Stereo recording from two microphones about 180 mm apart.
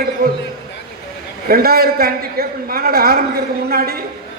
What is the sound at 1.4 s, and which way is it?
A man's voice, 55° right (ahead or behind).